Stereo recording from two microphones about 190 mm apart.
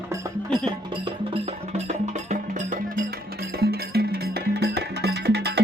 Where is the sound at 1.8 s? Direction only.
40° right (ahead or behind).